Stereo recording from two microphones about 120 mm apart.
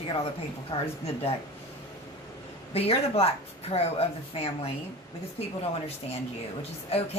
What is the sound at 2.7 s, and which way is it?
Speech, 55° left (ahead or behind).